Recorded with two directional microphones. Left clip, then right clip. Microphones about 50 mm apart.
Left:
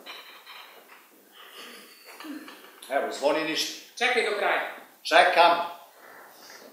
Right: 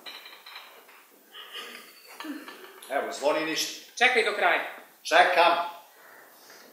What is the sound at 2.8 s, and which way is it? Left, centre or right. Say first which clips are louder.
A woman's voice: left 1 dB; centre.